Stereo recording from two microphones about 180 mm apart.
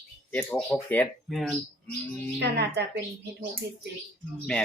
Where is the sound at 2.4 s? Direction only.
70° right (ahead or behind).